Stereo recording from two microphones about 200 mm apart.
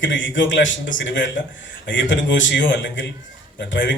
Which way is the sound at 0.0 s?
65° left (ahead or behind).